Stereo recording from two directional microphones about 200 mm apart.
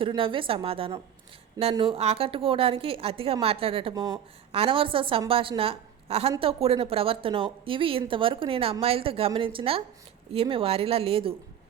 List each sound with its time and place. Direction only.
0.0 s a woman's voice: 25° right (ahead or behind)